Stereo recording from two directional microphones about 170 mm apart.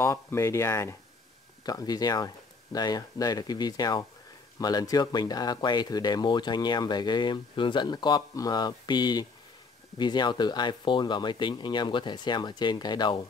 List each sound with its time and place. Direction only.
0.0 s speech: 15° left (ahead or behind)